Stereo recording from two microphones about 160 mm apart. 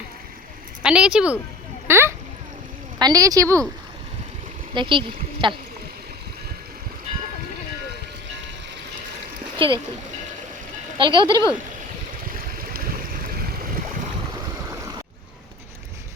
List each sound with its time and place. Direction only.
0.8 s speech: 5° right (ahead or behind)
1.9 s a sound: 15° right (ahead or behind)
3.0 s a woman's voice: 20° right (ahead or behind)
4.7 s speech: 30° right (ahead or behind)
9.6 s speech: 30° right (ahead or behind)
10.9 s speech: 30° right (ahead or behind)
11.3 s speech: 20° left (ahead or behind)
12.3 s boat: 65° right (ahead or behind)